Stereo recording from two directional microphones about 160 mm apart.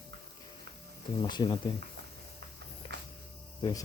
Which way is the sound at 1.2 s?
25° left (ahead or behind).